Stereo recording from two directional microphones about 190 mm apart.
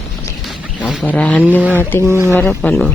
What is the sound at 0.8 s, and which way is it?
Speech, 5° left (ahead or behind).